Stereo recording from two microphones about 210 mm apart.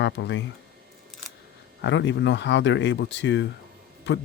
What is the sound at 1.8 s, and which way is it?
Speech, 60° left (ahead or behind).